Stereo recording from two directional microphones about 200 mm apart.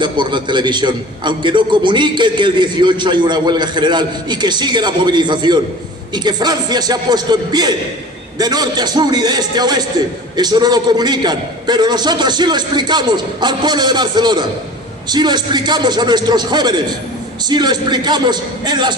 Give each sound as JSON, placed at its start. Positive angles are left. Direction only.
{"t": 0.0, "sound": "a man's voice", "side_deg": -25}